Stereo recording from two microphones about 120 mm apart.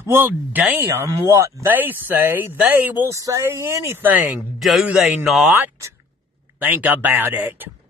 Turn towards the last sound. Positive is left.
turn(degrees=-15)  # may be behind; listen again after turning